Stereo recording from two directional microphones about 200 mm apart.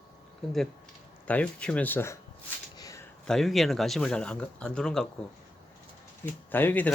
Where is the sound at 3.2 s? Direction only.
Centre (ahead or behind).